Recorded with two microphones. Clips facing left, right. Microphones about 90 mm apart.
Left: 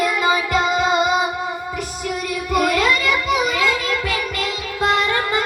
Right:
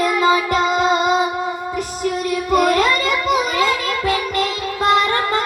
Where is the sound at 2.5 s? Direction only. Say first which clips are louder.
Right 2 dB; 40° right (ahead or behind).